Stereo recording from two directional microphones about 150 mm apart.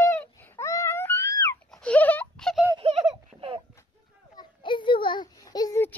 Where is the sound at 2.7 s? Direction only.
40° right (ahead or behind).